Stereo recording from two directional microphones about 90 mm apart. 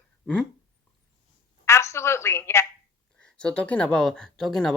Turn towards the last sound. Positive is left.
turn(degrees=5)  # may be behind; listen again after turning